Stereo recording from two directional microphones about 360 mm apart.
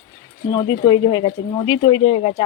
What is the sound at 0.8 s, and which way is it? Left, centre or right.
Speech, centre.